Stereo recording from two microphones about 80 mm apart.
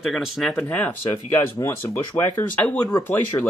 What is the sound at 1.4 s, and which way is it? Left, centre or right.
Speech, left.